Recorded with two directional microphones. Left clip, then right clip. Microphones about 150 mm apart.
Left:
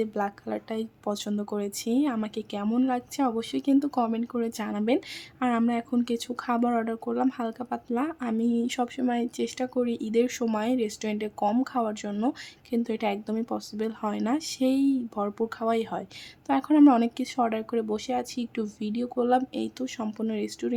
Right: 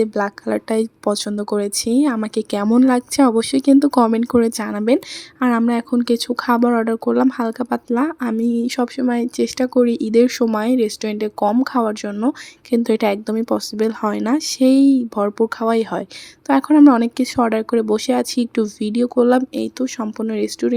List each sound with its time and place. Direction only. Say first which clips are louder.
0.0 s speech: right 10 dB; 30° right (ahead or behind)